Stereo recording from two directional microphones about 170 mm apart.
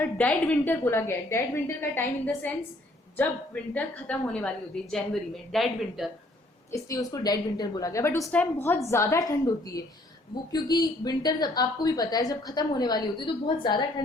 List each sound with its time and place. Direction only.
0.0 s a woman's voice: 10° left (ahead or behind)
6.7 s a woman's voice: 20° left (ahead or behind)
10.5 s a woman's voice: 25° left (ahead or behind)